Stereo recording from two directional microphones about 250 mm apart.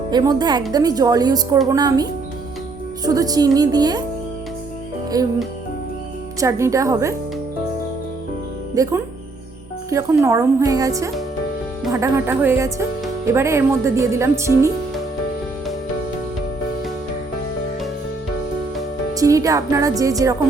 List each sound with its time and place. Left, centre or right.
0.1 s speech: centre
5.1 s speech: centre
6.4 s speech: centre
8.7 s speech: centre
19.1 s speech: centre